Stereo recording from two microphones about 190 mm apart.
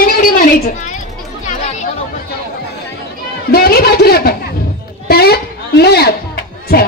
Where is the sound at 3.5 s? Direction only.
55° left (ahead or behind).